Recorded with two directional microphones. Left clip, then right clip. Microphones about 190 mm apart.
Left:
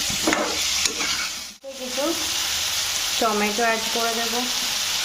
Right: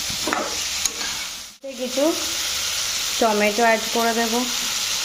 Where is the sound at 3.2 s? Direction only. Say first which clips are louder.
Right 4 dB; 25° right (ahead or behind).